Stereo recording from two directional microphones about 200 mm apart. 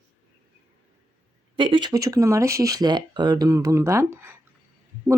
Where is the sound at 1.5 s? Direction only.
25° right (ahead or behind).